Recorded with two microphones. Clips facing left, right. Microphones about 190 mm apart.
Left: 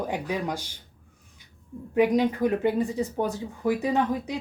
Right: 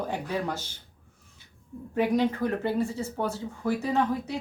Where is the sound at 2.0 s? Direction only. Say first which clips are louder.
Left 3 dB; 15° left (ahead or behind).